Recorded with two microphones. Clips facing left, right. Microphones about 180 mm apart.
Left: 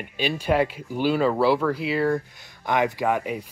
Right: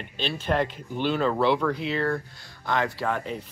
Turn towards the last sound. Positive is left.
turn(degrees=10)  # may be behind; listen again after turning